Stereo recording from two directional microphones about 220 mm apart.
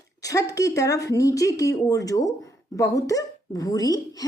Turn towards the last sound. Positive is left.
turn(degrees=15)  # may be behind; listen again after turning